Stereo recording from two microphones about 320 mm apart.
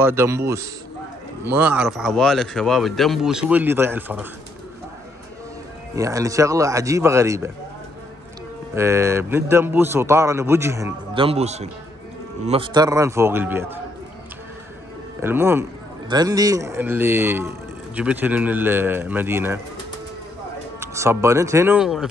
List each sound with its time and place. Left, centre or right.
0.0 s a man's voice: centre
5.9 s a man's voice: centre
8.7 s a man's voice: centre
11.1 s a man's voice: centre
15.2 s a man's voice: centre
20.8 s a man's voice: centre